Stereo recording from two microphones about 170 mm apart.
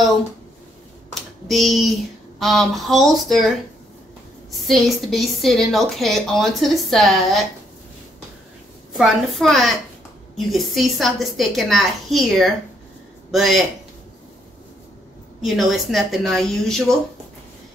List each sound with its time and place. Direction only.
1.1 s a woman's voice: centre (ahead or behind)
8.9 s a woman's voice: centre (ahead or behind)
15.4 s a woman's voice: centre (ahead or behind)